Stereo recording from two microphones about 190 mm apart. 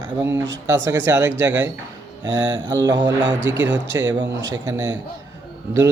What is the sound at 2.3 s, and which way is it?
A man's voice, 25° right (ahead or behind).